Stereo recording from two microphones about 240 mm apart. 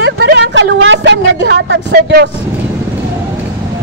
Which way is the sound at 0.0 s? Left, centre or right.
Right.